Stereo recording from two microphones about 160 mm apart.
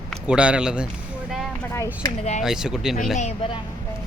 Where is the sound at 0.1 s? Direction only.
5° right (ahead or behind).